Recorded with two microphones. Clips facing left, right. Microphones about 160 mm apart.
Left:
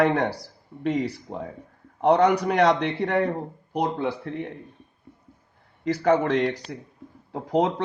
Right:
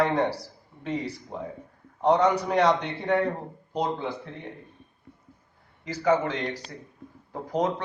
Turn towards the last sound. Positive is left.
turn(degrees=70)  # may be behind; listen again after turning